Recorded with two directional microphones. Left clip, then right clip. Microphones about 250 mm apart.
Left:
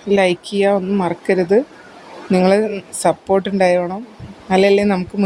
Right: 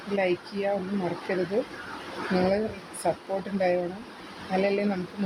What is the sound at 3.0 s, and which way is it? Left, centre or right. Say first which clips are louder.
Speech: left 12 dB; left.